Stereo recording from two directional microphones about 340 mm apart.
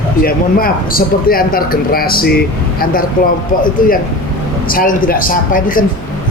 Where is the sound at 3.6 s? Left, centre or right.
Left.